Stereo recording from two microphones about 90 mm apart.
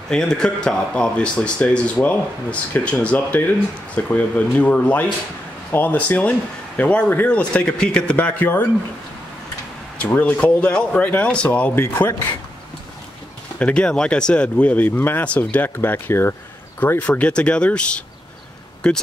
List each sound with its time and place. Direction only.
0.1 s speech: 5° left (ahead or behind)
9.9 s speech: 15° left (ahead or behind)
11.8 s speech: 30° left (ahead or behind)
13.6 s speech: 15° left (ahead or behind)